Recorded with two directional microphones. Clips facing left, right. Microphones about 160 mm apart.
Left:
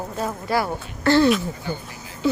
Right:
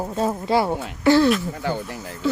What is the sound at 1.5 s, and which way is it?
Speech, 75° right (ahead or behind).